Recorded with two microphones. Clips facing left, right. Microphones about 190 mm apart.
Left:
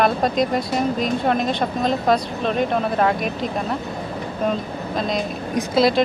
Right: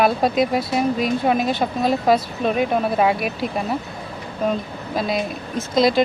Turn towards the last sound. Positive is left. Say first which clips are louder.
# even
turn(degrees=0)  # may be behind; listen again after turning